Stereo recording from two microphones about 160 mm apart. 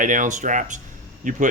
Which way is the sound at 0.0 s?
55° right (ahead or behind).